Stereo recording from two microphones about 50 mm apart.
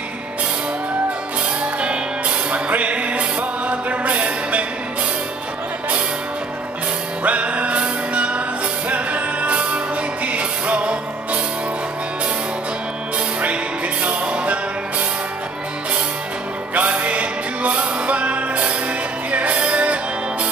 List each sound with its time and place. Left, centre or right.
1.8 s music: right
7.2 s music: right
14.0 s music: right
16.7 s music: right